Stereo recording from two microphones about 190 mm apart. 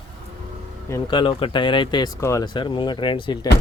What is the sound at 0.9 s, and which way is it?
Speech, 25° left (ahead or behind).